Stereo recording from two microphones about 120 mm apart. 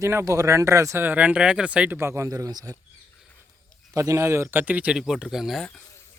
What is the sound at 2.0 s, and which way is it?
Speech, 25° right (ahead or behind).